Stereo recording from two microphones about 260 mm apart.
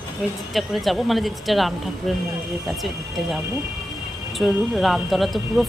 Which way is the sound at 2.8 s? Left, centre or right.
Centre.